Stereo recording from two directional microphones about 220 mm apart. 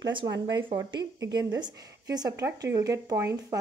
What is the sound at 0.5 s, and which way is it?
Speech, 20° right (ahead or behind).